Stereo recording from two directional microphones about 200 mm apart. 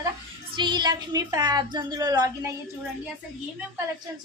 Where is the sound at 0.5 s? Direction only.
25° right (ahead or behind).